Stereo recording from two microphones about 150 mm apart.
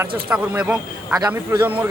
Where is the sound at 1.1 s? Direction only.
20° right (ahead or behind).